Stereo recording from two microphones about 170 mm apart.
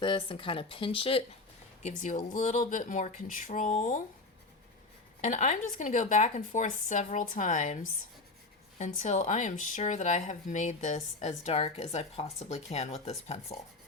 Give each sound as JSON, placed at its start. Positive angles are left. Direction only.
{"t": 0.0, "sound": "speech", "side_deg": 30}
{"t": 1.8, "sound": "a woman's voice", "side_deg": 45}
{"t": 5.2, "sound": "a woman's voice", "side_deg": 45}